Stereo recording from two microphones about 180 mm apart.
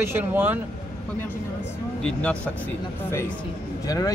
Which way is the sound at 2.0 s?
5° left (ahead or behind).